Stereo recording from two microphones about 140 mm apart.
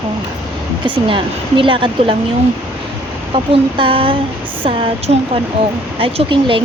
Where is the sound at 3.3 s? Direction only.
40° right (ahead or behind).